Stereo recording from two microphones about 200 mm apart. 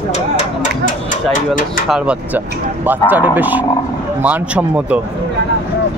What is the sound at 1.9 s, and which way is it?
A man's voice, 5° right (ahead or behind).